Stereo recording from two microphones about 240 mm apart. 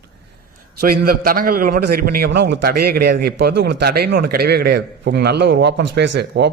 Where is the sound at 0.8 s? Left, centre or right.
Right.